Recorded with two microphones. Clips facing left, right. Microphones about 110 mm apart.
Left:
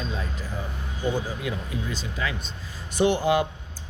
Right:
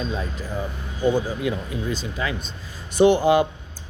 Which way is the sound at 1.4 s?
25° right (ahead or behind).